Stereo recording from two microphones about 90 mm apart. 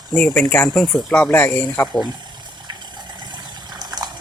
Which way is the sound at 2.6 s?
50° right (ahead or behind).